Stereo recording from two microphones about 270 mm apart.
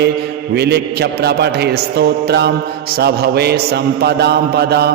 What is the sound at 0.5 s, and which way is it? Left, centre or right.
Mantra, right.